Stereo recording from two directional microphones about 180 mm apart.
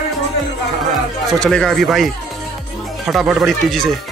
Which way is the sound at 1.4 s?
5° left (ahead or behind).